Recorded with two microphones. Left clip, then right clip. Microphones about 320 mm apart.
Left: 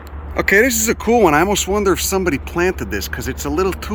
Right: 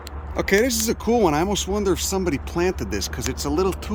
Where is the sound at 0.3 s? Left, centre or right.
Centre.